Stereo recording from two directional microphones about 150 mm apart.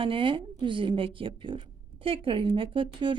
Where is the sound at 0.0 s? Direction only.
35° right (ahead or behind).